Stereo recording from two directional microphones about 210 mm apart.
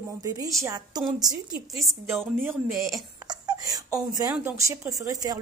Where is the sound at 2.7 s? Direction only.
Centre (ahead or behind).